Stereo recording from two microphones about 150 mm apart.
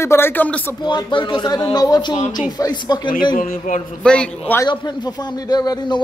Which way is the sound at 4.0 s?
5° left (ahead or behind).